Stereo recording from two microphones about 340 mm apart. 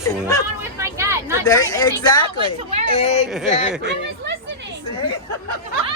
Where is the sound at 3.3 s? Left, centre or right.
Centre.